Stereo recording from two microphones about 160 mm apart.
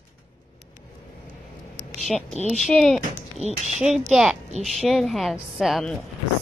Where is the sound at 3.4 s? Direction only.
45° right (ahead or behind).